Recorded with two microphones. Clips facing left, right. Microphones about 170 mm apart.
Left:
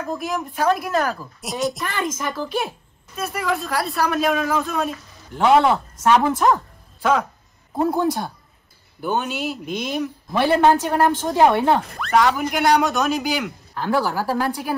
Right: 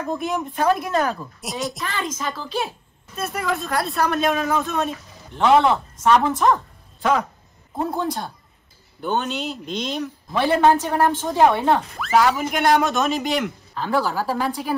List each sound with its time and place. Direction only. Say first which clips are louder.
0.0 s speech: right 1 dB; centre (ahead or behind)
2.0 s a woman's voice: left 2 dB; 15° left (ahead or behind)
3.2 s a woman's voice: left 1 dB; centre (ahead or behind)
12.0 s speech: even; centre (ahead or behind)